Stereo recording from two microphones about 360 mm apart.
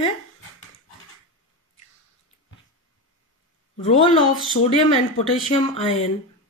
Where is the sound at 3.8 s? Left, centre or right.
Centre.